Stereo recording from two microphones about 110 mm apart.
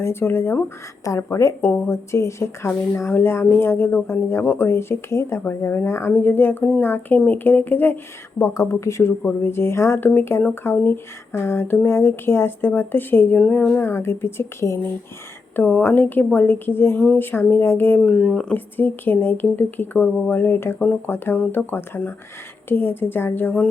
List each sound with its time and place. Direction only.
0.0 s speech: 20° left (ahead or behind)
13.8 s speech: 20° left (ahead or behind); by 18.5 s 5° left (ahead or behind)
18.5 s speech: 15° left (ahead or behind)